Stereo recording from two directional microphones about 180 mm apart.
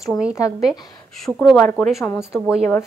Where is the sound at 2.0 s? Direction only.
15° left (ahead or behind).